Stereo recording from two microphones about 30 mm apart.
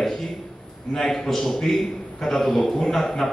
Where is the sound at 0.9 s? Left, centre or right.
Centre.